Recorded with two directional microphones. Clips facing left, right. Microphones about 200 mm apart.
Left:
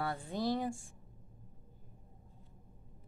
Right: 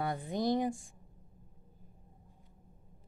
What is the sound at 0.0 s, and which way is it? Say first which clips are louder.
Speech: right 3 dB; 15° right (ahead or behind).